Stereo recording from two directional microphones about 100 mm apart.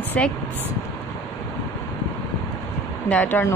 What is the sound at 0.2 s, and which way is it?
Speech, 15° left (ahead or behind).